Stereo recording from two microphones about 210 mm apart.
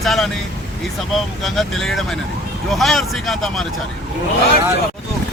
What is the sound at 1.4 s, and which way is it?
Speech, centre (ahead or behind).